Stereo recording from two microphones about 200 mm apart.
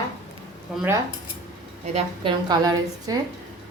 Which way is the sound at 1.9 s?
25° right (ahead or behind).